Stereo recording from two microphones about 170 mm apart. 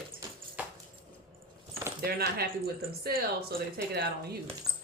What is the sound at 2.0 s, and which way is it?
Speech, 65° right (ahead or behind).